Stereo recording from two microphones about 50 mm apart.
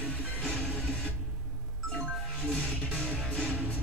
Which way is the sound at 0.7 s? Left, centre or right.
Left.